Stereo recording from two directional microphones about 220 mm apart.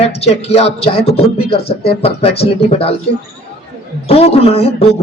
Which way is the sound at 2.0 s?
25° left (ahead or behind).